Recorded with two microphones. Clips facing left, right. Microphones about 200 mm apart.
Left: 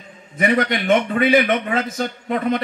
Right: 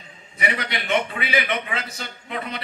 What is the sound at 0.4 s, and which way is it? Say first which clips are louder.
A man's voice: left 9 dB; 45° left (ahead or behind).